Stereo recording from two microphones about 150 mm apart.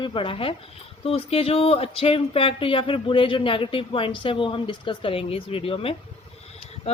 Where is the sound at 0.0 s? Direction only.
35° left (ahead or behind).